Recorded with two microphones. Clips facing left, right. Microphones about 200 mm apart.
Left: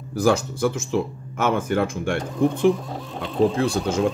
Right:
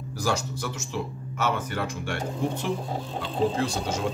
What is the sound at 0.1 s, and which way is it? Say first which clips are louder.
Speech: left 9 dB; 55° left (ahead or behind).